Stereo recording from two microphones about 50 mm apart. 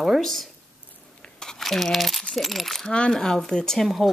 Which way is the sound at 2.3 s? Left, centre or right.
Centre.